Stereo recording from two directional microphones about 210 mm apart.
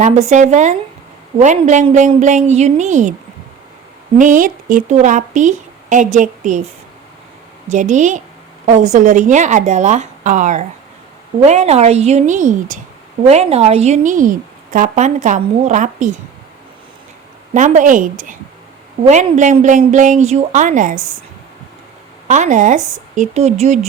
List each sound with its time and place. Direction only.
0.0 s a woman's voice: 35° right (ahead or behind)
4.2 s a woman's voice: 40° right (ahead or behind)
7.7 s a woman's voice: 35° right (ahead or behind)
17.5 s a woman's voice: 35° right (ahead or behind)
22.3 s a woman's voice: 35° right (ahead or behind)